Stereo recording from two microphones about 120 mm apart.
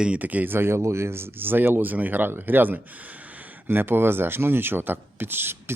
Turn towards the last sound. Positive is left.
turn(degrees=-20)  # may be behind; listen again after turning